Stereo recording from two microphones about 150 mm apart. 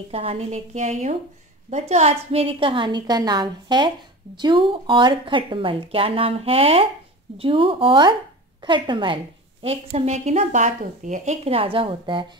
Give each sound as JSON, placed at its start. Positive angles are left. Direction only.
{"t": 0.1, "sound": "a woman's voice", "side_deg": -40}